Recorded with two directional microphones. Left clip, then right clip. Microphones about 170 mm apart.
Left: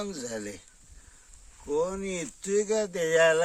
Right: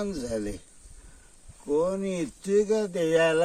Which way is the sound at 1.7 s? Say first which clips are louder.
Right 3 dB; 10° left (ahead or behind).